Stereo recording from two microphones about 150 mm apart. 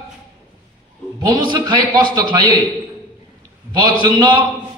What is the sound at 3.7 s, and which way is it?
Speech, 30° right (ahead or behind).